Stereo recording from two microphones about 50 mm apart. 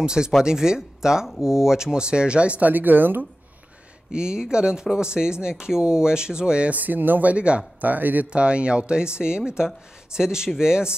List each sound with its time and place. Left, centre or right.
0.0 s speech: centre
2.7 s speech: right
4.1 s speech: centre
6.7 s speech: right
7.8 s speech: right
8.3 s speech: right